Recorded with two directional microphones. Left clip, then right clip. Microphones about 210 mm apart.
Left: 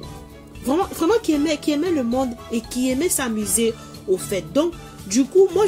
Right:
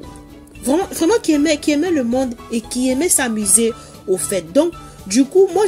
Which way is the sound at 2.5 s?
15° right (ahead or behind).